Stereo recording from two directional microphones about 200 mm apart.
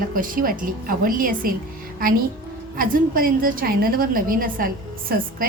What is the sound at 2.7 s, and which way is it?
A woman's voice, 45° right (ahead or behind).